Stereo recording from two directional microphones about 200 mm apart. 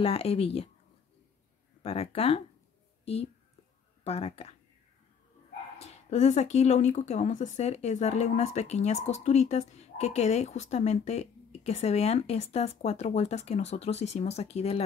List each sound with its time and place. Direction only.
0.0 s speech: 30° left (ahead or behind)
1.8 s speech: 30° left (ahead or behind)
4.0 s speech: 30° left (ahead or behind)
5.8 s speech: 35° left (ahead or behind)